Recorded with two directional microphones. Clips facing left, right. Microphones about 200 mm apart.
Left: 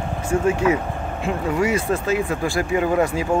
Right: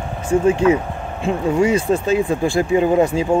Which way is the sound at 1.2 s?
25° right (ahead or behind).